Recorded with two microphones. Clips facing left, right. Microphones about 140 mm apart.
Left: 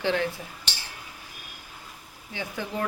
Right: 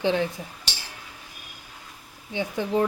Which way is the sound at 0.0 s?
15° right (ahead or behind).